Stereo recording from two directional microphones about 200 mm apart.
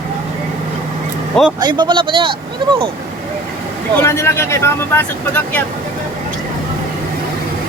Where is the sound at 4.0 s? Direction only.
15° left (ahead or behind).